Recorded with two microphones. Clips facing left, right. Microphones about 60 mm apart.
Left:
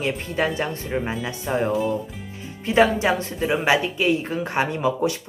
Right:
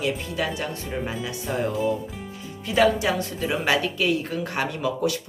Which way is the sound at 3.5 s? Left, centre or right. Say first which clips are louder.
Left 3 dB; centre.